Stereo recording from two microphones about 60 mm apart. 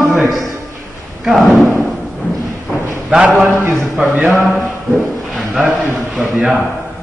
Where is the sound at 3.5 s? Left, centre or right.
Right.